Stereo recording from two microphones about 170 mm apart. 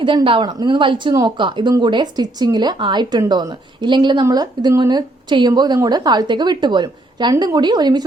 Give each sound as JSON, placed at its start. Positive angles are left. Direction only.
{"t": 0.0, "sound": "speech", "side_deg": -30}